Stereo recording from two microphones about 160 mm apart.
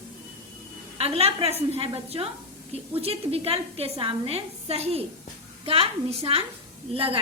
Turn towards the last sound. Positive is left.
turn(degrees=-35)  # may be behind; listen again after turning